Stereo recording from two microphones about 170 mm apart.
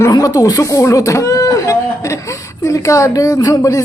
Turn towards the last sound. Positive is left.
turn(degrees=20)  # may be behind; listen again after turning